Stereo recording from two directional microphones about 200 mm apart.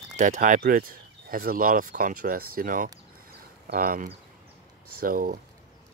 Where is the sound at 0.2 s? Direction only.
40° right (ahead or behind).